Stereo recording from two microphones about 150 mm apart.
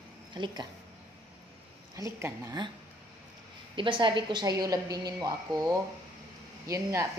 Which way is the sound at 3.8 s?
35° right (ahead or behind).